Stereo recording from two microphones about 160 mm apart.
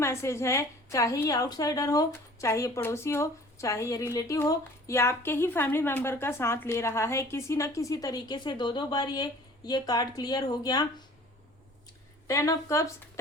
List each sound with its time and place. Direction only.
0.0 s a woman's voice: 15° left (ahead or behind)
12.3 s a woman's voice: 20° left (ahead or behind)